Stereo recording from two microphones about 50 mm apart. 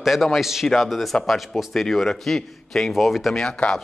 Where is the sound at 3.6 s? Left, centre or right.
Centre.